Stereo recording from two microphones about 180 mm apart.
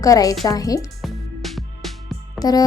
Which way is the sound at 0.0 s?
20° left (ahead or behind).